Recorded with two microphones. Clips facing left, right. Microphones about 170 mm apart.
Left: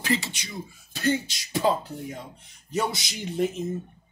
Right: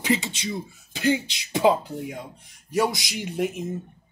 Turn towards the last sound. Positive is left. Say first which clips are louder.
# even
turn(degrees=-15)  # may be behind; listen again after turning